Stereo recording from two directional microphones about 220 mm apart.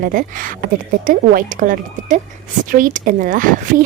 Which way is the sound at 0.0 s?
40° right (ahead or behind).